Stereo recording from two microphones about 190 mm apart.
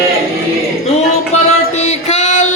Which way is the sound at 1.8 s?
35° left (ahead or behind).